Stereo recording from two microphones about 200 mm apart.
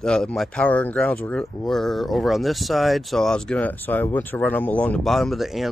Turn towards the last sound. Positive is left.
turn(degrees=0)  # may be behind; listen again after turning